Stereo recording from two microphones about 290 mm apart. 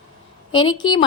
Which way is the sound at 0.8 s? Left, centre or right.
Centre.